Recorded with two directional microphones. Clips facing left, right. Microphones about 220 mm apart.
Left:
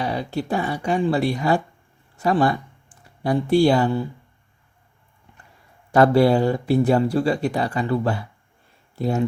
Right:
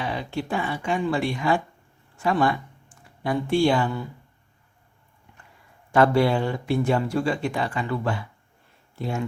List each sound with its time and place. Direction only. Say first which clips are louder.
0.0 s speech: left 4 dB; 40° left (ahead or behind)
5.9 s speech: left 4 dB; 40° left (ahead or behind)